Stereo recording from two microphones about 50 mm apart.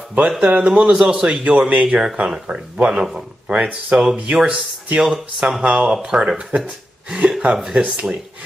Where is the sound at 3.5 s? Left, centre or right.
Right.